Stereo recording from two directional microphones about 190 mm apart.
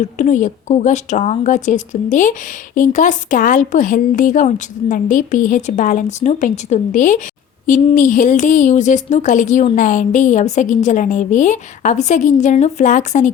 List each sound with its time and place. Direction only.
0.0 s a woman's voice: 40° left (ahead or behind)